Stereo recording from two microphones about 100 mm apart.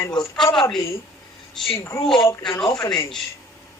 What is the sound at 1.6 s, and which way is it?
Speech, 5° left (ahead or behind).